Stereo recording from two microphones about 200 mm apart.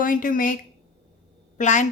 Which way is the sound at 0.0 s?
40° left (ahead or behind).